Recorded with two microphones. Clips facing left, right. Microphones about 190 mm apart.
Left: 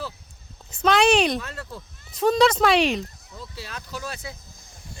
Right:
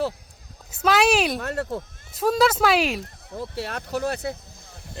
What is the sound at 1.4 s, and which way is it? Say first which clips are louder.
Speech: right 8 dB; 65° right (ahead or behind).